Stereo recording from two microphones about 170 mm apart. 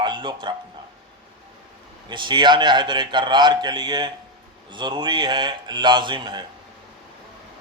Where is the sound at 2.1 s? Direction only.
25° right (ahead or behind).